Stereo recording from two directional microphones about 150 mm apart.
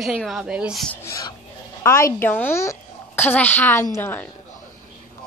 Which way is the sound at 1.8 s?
20° left (ahead or behind).